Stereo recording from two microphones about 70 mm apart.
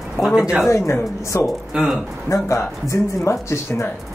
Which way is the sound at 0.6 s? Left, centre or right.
Left.